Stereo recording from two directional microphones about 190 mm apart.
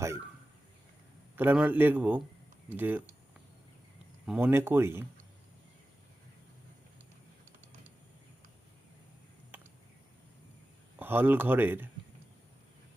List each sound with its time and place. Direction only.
1.4 s speech: 10° right (ahead or behind)
4.3 s speech: 10° right (ahead or behind)
9.5 s a sound: 10° right (ahead or behind)
11.0 s speech: 10° right (ahead or behind)